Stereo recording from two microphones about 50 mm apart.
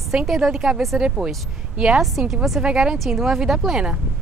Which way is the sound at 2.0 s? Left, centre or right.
Centre.